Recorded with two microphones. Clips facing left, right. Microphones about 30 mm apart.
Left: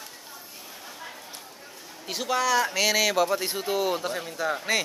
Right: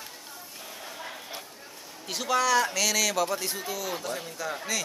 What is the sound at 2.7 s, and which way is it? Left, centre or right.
A man's voice, left.